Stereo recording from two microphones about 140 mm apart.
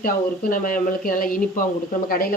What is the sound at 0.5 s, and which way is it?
Speech, 75° left (ahead or behind).